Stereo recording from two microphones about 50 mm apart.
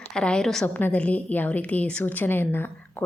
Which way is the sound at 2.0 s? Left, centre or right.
Left.